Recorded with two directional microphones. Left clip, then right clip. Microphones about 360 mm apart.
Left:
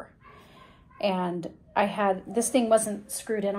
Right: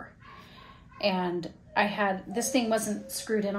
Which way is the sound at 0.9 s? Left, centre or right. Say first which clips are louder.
Left 1 dB; centre.